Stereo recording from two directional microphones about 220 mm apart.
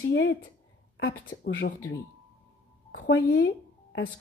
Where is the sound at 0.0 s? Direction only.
50° left (ahead or behind).